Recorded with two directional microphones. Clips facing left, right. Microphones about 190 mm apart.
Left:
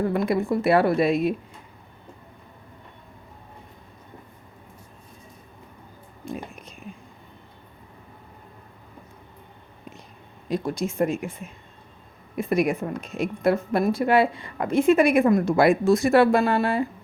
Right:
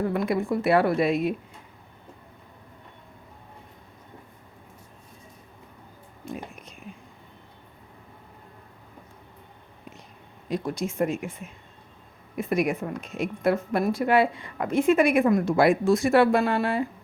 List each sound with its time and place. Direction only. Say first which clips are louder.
0.1 s a woman's voice: left 2 dB; 30° left (ahead or behind)
10.5 s a woman's voice: left 2 dB; 35° left (ahead or behind)
12.4 s a woman's voice: left 2 dB; 35° left (ahead or behind)